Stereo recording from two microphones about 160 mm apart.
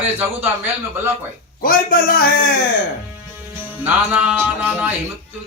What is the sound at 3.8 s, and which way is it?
Speech, 10° right (ahead or behind).